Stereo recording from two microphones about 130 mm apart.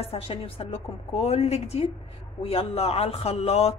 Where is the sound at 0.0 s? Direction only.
50° left (ahead or behind).